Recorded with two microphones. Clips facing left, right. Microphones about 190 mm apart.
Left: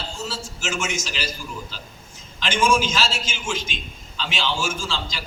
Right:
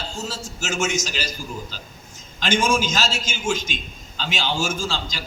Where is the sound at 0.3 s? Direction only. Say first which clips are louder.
Left 1 dB; 40° right (ahead or behind).